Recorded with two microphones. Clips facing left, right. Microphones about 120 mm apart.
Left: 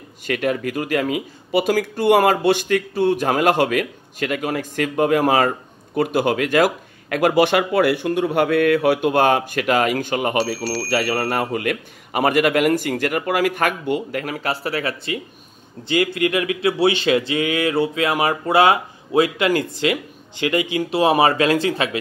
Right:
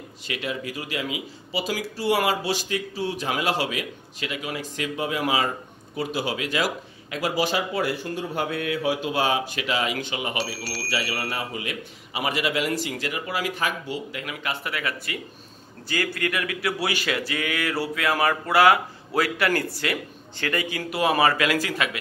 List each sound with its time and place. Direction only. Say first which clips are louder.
0.3 s speech: left 9 dB; 50° left (ahead or behind); by 21.9 s 25° left (ahead or behind)